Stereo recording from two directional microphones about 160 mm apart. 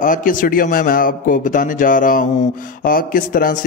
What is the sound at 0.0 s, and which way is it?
A man's voice, 55° left (ahead or behind).